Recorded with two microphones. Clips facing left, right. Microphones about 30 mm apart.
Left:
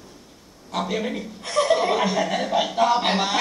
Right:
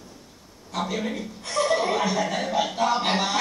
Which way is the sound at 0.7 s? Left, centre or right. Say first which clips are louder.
Left 2 dB; centre.